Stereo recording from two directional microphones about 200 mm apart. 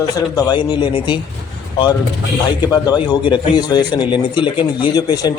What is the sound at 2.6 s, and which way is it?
A man's voice, 20° left (ahead or behind).